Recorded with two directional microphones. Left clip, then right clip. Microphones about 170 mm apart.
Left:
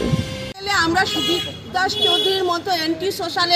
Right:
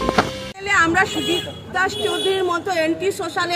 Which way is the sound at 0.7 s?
25° right (ahead or behind).